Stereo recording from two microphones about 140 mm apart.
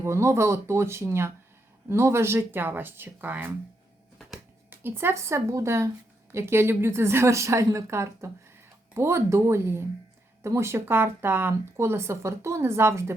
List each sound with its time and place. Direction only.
0.0 s a woman's voice: 20° right (ahead or behind)
4.7 s a woman's voice: 15° right (ahead or behind)